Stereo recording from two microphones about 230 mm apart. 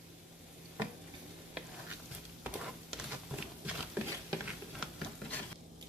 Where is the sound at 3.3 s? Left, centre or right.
Centre.